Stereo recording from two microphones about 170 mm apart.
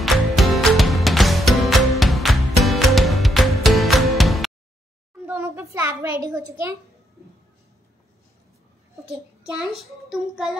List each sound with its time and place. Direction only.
0.0 s music: centre (ahead or behind)
5.2 s a sound: 15° right (ahead or behind)
9.5 s a child's voice: centre (ahead or behind)